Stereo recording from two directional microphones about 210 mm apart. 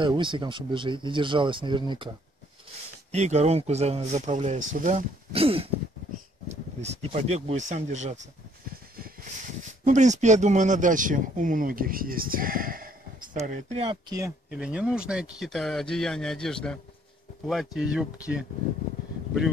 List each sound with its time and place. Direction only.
0.0 s speech: 20° right (ahead or behind)
3.1 s speech: 35° right (ahead or behind)
6.8 s speech: 30° right (ahead or behind)
9.8 s speech: 35° right (ahead or behind); by 14.3 s 20° right (ahead or behind)
14.5 s speech: 5° right (ahead or behind)